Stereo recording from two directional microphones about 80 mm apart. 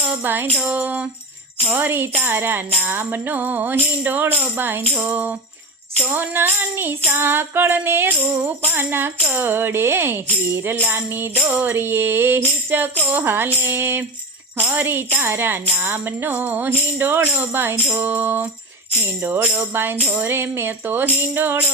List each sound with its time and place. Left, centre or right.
0.1 s music: right
0.6 s speech: right
11.3 s speech: centre